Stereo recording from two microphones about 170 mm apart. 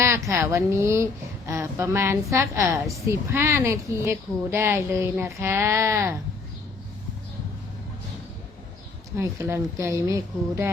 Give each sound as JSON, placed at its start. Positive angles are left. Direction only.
{"t": 0.0, "sound": "a woman's voice", "side_deg": -15}
{"t": 9.1, "sound": "a woman's voice", "side_deg": -15}